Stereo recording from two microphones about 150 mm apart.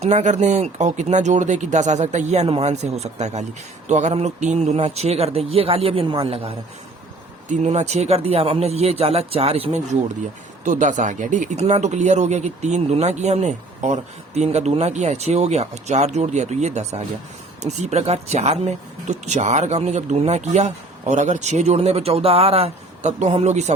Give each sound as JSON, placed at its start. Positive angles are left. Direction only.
{"t": 0.0, "sound": "speech", "side_deg": -50}
{"t": 7.4, "sound": "speech", "side_deg": -50}